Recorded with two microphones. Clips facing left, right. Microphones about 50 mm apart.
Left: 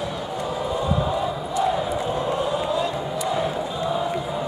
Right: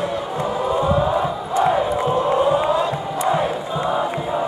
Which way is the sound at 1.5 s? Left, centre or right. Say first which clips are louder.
Right 5 dB; right.